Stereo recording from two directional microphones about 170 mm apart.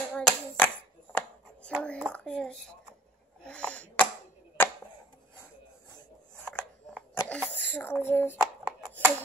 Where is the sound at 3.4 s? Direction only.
5° left (ahead or behind).